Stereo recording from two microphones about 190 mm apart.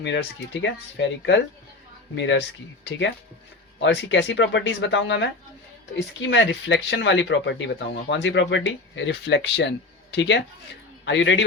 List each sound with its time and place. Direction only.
0.0 s speech: 70° left (ahead or behind)
3.8 s a man's voice: 70° left (ahead or behind)